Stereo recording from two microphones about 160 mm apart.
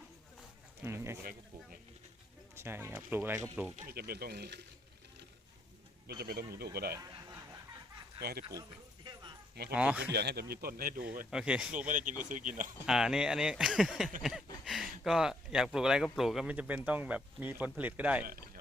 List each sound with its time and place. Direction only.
0.9 s speech: 15° right (ahead or behind)
1.2 s speech: 65° right (ahead or behind)
2.6 s speech: 15° right (ahead or behind)
3.8 s speech: 70° right (ahead or behind); by 4.6 s 90° right
6.1 s speech: 80° right
6.9 s snicker: 20° right (ahead or behind)
8.2 s speech: 80° right
9.7 s speech: 10° right (ahead or behind)
10.1 s speech: 90° right
10.5 s speech: 70° right (ahead or behind)
11.3 s speech: 5° right (ahead or behind)
11.9 s speech: 55° right (ahead or behind)
12.8 s speech: 5° right (ahead or behind)